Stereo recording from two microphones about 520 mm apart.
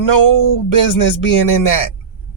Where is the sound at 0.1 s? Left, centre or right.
Left.